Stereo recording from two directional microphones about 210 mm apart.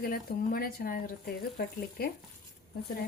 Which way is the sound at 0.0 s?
45° left (ahead or behind).